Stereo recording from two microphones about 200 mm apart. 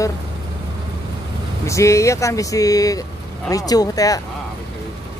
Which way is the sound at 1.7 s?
15° left (ahead or behind).